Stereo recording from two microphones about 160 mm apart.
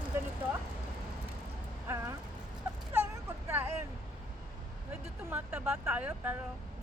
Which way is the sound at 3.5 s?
15° right (ahead or behind).